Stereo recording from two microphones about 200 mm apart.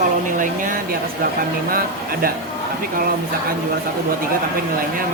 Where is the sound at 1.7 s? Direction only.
45° right (ahead or behind).